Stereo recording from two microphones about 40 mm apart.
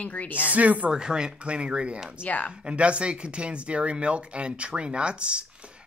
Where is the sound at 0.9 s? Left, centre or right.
Centre.